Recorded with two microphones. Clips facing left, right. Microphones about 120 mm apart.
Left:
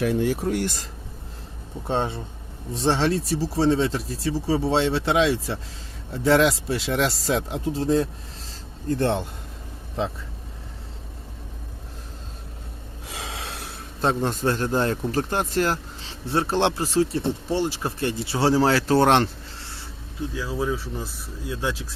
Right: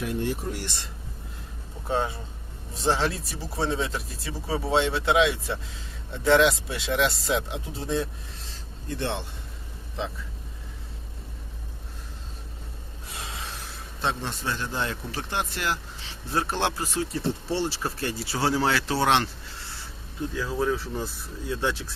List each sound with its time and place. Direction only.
0.0 s speech: 90° left
1.9 s a man's voice: 25° left (ahead or behind); by 9.2 s 45° left (ahead or behind)
13.1 s gasp: 90° left
14.0 s a man's voice: 45° left (ahead or behind)
20.3 s speech: 5° left (ahead or behind)